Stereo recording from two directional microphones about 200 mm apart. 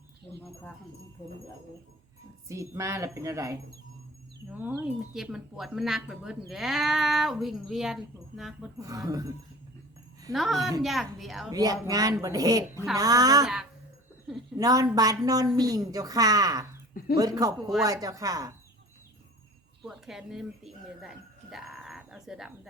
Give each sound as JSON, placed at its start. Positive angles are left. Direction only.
{"t": 2.5, "sound": "speech", "side_deg": -15}
{"t": 8.8, "sound": "speech", "side_deg": -15}
{"t": 10.3, "sound": "speech", "side_deg": 0}
{"t": 11.5, "sound": "speech", "side_deg": -20}
{"t": 14.6, "sound": "a woman's voice", "side_deg": -20}
{"t": 19.8, "sound": "speech", "side_deg": 0}
{"t": 21.5, "sound": "a sound", "side_deg": 0}